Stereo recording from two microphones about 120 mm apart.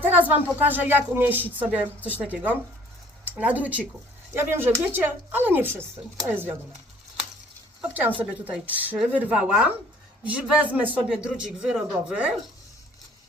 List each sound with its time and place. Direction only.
0.0 s music: 15° right (ahead or behind)
0.6 s speech: 15° right (ahead or behind)
7.8 s speech: 15° right (ahead or behind)